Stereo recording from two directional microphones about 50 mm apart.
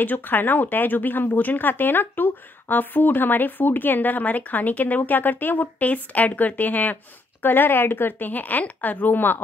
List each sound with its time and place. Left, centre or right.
0.0 s speech: left